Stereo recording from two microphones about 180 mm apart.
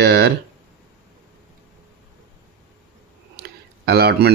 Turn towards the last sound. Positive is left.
turn(degrees=-60)  # may be behind; listen again after turning